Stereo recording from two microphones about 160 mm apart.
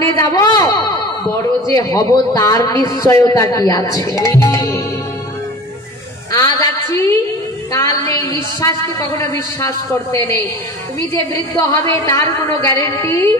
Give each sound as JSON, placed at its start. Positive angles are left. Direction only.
{"t": 0.0, "sound": "a man's voice", "side_deg": 20}
{"t": 6.3, "sound": "a sound", "side_deg": 20}
{"t": 7.7, "sound": "music", "side_deg": 20}
{"t": 8.5, "sound": "a woman's voice", "side_deg": 20}
{"t": 11.0, "sound": "a woman's voice", "side_deg": 20}